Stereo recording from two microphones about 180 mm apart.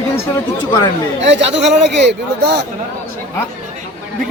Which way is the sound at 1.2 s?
75° right (ahead or behind).